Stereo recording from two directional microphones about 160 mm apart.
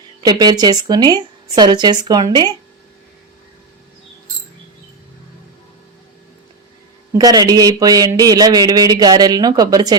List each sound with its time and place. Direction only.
0.2 s speech: 25° right (ahead or behind)
7.1 s speech: 25° right (ahead or behind)